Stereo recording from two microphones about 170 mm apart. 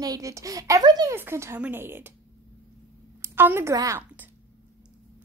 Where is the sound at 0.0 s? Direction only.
20° right (ahead or behind).